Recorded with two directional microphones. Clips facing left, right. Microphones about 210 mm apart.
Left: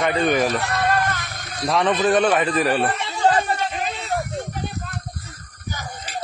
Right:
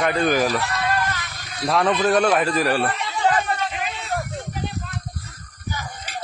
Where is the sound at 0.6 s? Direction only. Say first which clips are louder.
Left 2 dB; 55° left (ahead or behind).